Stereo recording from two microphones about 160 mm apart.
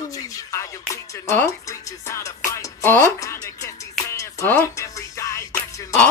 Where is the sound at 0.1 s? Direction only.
20° left (ahead or behind).